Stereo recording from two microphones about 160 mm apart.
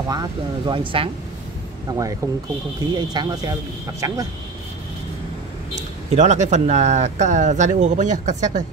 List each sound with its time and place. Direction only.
0.1 s speech: 25° right (ahead or behind)
5.8 s speech: 45° right (ahead or behind)